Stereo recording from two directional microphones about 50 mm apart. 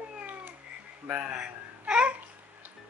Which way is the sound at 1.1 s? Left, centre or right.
Right.